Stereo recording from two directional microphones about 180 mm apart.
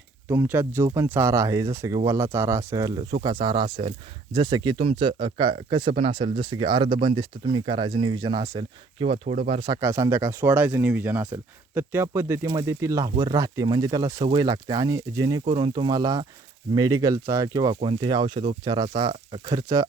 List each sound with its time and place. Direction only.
0.3 s speech: 10° right (ahead or behind); by 9.4 s 35° right (ahead or behind)
9.5 s speech: 25° right (ahead or behind)
15.4 s speech: 35° right (ahead or behind)
15.7 s speech: 25° right (ahead or behind)